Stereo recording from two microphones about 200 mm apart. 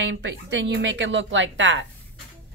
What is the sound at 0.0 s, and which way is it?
A woman's voice, 65° right (ahead or behind).